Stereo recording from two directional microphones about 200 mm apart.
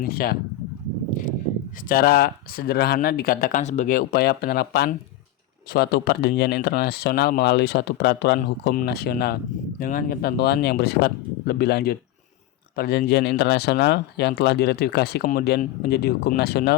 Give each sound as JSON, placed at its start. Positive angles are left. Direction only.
{"t": 0.0, "sound": "speech", "side_deg": 50}
{"t": 1.9, "sound": "speech", "side_deg": 50}